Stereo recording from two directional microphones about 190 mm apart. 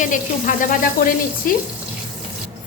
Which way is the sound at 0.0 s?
45° left (ahead or behind).